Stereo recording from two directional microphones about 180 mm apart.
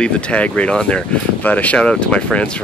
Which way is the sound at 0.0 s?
5° left (ahead or behind).